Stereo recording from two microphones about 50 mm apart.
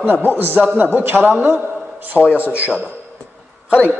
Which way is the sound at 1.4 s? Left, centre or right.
Right.